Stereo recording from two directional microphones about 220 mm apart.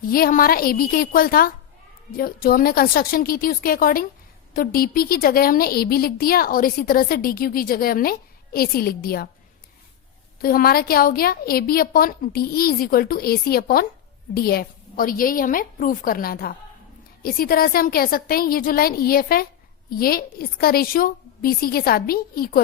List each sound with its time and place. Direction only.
0.1 s a woman's voice: 40° left (ahead or behind)
10.4 s a woman's voice: 40° left (ahead or behind)